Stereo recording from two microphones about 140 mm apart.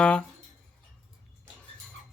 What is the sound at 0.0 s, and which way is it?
Speech, 5° left (ahead or behind).